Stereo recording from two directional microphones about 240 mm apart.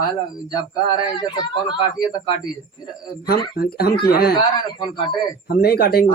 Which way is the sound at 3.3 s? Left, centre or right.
Left.